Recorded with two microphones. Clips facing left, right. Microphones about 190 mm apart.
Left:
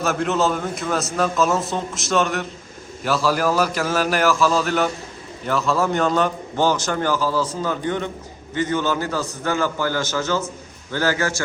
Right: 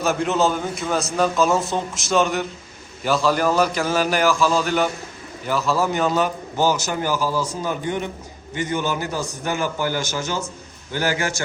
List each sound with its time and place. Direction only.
0.0 s a man's voice: centre (ahead or behind); by 11.4 s 15° right (ahead or behind)